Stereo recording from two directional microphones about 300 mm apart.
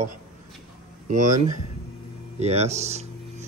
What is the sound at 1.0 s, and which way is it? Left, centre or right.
Speech, right.